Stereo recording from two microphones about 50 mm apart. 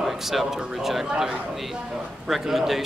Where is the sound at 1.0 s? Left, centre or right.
Centre.